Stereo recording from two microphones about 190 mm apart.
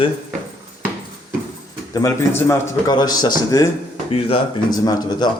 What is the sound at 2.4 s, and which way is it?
A man's voice, 15° left (ahead or behind).